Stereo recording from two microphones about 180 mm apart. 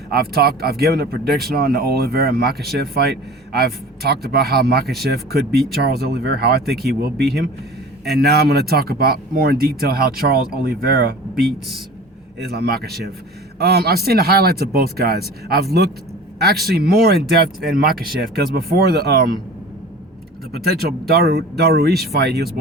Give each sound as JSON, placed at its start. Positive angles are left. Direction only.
{"t": 0.1, "sound": "speech", "side_deg": -60}
{"t": 12.4, "sound": "speech", "side_deg": -60}
{"t": 20.7, "sound": "speech", "side_deg": -60}